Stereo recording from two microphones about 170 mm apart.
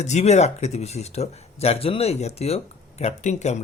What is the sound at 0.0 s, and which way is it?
Speech, 40° left (ahead or behind).